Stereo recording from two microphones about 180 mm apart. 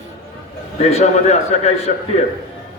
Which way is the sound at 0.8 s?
35° left (ahead or behind).